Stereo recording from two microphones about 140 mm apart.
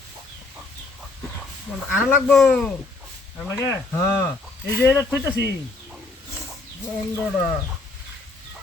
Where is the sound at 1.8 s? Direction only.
5° right (ahead or behind).